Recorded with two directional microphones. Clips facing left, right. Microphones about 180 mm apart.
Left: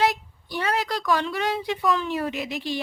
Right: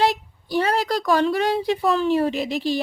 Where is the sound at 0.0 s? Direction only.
30° right (ahead or behind).